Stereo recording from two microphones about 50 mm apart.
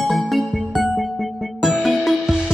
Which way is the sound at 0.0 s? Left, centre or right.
Centre.